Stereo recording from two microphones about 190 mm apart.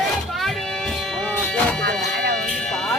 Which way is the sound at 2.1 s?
60° right (ahead or behind).